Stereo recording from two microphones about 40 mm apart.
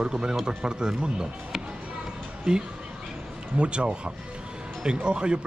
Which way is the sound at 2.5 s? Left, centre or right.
Right.